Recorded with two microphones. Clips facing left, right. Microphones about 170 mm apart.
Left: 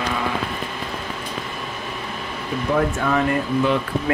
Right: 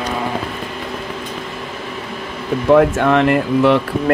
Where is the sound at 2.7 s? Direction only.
75° right (ahead or behind).